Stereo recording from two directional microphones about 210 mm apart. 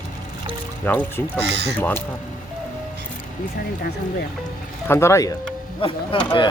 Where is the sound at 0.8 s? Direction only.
10° left (ahead or behind).